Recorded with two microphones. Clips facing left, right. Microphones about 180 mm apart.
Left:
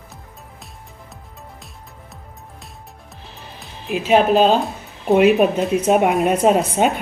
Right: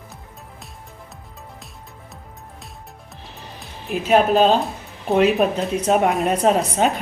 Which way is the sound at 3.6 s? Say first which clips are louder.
Left 2 dB; centre (ahead or behind).